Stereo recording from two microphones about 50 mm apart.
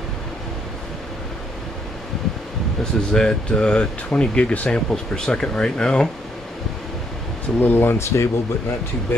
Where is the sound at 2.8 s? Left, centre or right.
Centre.